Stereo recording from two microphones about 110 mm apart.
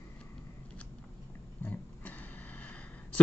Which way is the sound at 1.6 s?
20° left (ahead or behind).